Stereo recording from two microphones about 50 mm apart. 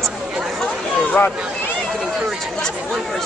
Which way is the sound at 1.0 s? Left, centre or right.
Left.